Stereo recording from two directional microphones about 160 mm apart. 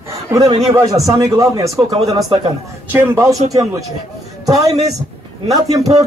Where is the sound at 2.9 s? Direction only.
15° right (ahead or behind).